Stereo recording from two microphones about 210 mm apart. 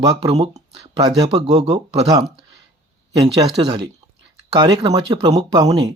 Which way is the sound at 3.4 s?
30° right (ahead or behind).